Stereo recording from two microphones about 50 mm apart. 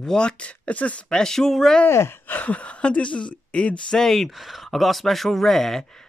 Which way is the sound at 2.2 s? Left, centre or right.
Left.